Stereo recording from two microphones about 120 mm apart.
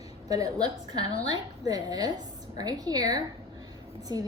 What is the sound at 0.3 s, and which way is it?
A woman's voice, 30° right (ahead or behind).